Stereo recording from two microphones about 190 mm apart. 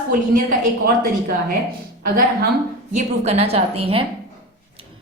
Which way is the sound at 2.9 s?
35° right (ahead or behind).